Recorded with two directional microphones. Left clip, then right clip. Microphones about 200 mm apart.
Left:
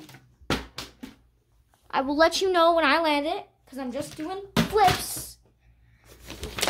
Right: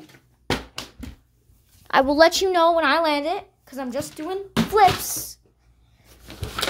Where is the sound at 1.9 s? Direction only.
20° right (ahead or behind).